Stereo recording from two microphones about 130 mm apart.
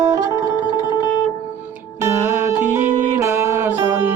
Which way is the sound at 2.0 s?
15° right (ahead or behind).